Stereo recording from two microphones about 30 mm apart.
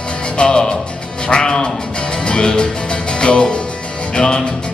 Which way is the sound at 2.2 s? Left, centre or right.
Left.